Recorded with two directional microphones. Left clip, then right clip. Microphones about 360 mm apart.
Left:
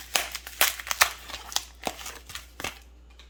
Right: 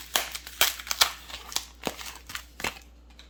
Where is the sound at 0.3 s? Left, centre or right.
Centre.